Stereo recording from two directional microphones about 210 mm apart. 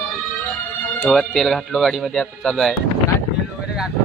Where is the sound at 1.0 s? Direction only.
Centre (ahead or behind).